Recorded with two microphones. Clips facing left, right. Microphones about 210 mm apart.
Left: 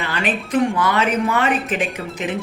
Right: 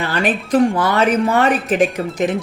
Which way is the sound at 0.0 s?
40° right (ahead or behind).